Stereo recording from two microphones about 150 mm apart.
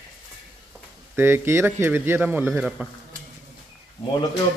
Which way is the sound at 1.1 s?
15° right (ahead or behind).